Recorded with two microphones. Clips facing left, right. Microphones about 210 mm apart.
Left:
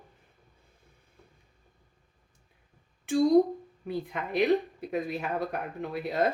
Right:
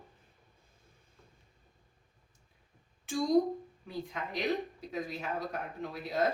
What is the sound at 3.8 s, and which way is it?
Speech, 60° left (ahead or behind).